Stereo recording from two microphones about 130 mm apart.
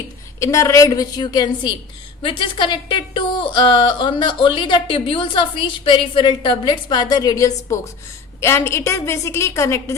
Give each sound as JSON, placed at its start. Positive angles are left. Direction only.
{"t": 0.3, "sound": "a woman's voice", "side_deg": 25}